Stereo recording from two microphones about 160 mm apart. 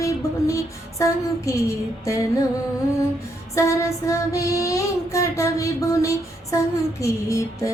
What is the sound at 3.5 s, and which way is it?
Child singing, 20° left (ahead or behind).